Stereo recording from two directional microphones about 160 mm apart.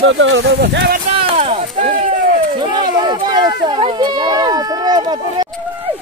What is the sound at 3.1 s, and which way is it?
Speech, 25° right (ahead or behind).